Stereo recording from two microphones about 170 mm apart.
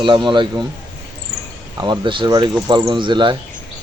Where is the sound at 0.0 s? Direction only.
30° right (ahead or behind).